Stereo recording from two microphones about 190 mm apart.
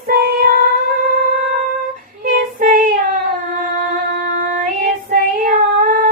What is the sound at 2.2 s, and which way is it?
Child singing, 50° right (ahead or behind).